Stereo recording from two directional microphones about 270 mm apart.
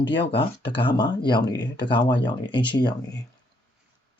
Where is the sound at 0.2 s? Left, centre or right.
Centre.